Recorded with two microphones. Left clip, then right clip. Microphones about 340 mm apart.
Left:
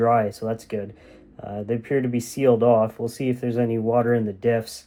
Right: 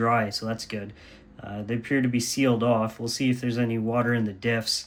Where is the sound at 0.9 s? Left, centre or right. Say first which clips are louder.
Left 1 dB; centre.